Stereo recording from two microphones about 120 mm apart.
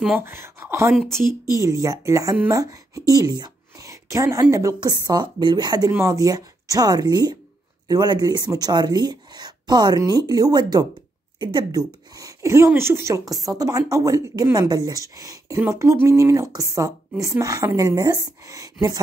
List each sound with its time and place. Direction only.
0.2 s speech: 20° right (ahead or behind); by 5.9 s 35° right (ahead or behind)
5.9 s speech: 25° right (ahead or behind)